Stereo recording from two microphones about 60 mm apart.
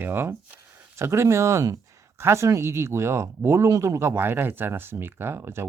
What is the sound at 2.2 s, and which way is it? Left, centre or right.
Speech, right.